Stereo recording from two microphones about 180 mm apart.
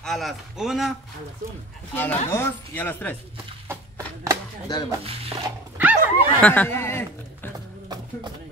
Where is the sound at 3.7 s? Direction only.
15° right (ahead or behind).